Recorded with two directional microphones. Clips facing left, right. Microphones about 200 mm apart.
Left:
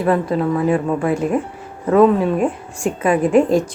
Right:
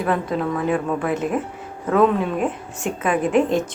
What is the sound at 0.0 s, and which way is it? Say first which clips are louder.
Speech: left 5 dB; 5° left (ahead or behind).